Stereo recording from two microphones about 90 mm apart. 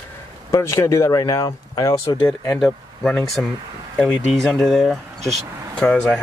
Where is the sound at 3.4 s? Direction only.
15° left (ahead or behind).